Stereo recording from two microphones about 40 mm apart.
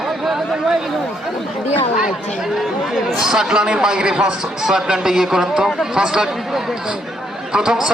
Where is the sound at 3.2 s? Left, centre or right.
Centre.